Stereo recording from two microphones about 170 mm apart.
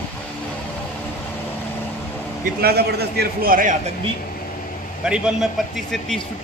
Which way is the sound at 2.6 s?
70° right (ahead or behind).